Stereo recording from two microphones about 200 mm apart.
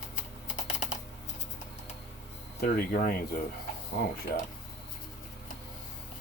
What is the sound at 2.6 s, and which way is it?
Speech, 50° left (ahead or behind).